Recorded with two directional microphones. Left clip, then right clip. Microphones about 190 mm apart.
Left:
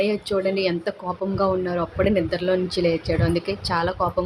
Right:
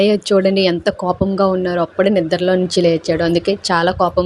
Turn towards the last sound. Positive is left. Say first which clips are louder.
# right 8 dB
turn(degrees=-35)  # may be behind; listen again after turning